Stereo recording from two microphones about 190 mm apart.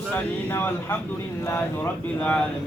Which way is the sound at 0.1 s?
10° left (ahead or behind).